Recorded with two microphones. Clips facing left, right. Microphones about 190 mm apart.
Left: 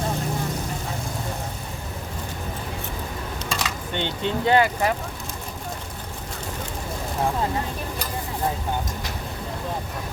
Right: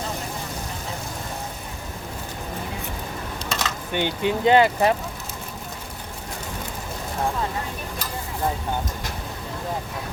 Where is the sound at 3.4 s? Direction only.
10° left (ahead or behind).